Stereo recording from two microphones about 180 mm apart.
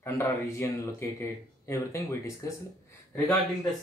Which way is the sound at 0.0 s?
15° left (ahead or behind).